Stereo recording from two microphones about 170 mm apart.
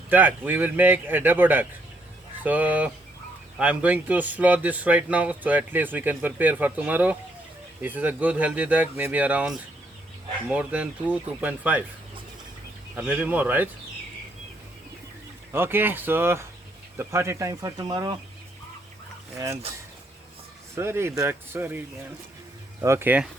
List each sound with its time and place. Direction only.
0.1 s speech: 10° right (ahead or behind)
13.0 s speech: 10° right (ahead or behind)
15.5 s speech: 10° right (ahead or behind)
20.7 s speech: 15° right (ahead or behind)
22.8 s speech: 15° right (ahead or behind)